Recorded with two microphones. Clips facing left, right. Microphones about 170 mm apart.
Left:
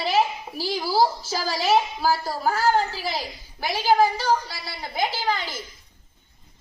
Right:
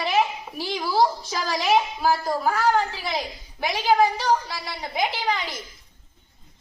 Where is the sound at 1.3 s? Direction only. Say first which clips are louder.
Left 1 dB; 35° left (ahead or behind).